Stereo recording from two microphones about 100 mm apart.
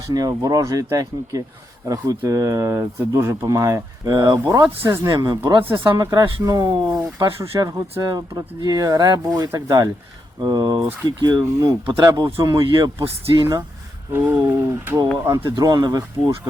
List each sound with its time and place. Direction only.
0.1 s speech: 40° right (ahead or behind)
4.0 s speech: 40° right (ahead or behind)
5.6 s speech: 20° right (ahead or behind)
6.0 s speech: 30° right (ahead or behind)
12.6 s speech: 55° right (ahead or behind)
14.1 s speech: 25° right (ahead or behind)
15.4 s speech: 45° right (ahead or behind)